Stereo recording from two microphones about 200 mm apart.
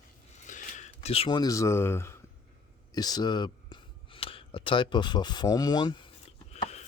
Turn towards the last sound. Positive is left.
turn(degrees=35)  # may be behind; listen again after turning